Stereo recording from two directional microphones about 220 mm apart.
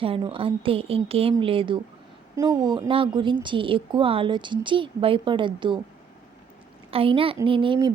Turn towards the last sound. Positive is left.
turn(degrees=-25)  # may be behind; listen again after turning